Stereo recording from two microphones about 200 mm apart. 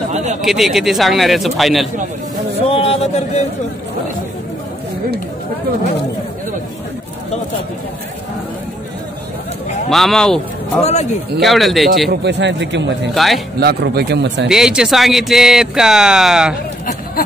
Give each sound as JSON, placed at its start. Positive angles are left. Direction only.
{"t": 0.1, "sound": "a man's voice", "side_deg": -35}
{"t": 0.4, "sound": "speech", "side_deg": 0}
{"t": 2.7, "sound": "a sound", "side_deg": 30}
{"t": 9.8, "sound": "speech", "side_deg": 0}
{"t": 10.8, "sound": "a man's voice", "side_deg": 35}
{"t": 11.4, "sound": "speech", "side_deg": 0}
{"t": 12.1, "sound": "a man's voice", "side_deg": -60}
{"t": 13.1, "sound": "speech", "side_deg": 0}
{"t": 13.6, "sound": "a man's voice", "side_deg": -55}
{"t": 14.5, "sound": "speech", "side_deg": -5}